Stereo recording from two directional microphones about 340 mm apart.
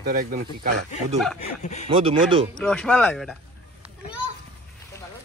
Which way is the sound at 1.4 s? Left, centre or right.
Centre.